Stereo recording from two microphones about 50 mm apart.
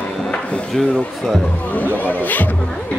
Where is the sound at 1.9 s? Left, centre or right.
Left.